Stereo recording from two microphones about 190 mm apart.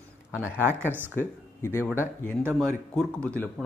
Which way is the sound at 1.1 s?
10° left (ahead or behind).